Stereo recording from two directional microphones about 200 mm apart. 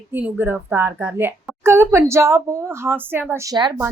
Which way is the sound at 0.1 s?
10° right (ahead or behind).